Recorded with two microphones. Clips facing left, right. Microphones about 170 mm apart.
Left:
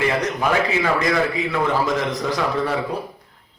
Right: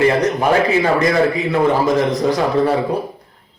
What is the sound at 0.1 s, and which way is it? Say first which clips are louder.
A man's voice: right 6 dB; 40° right (ahead or behind).